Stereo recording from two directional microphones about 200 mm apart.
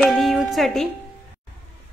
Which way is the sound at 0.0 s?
Centre (ahead or behind).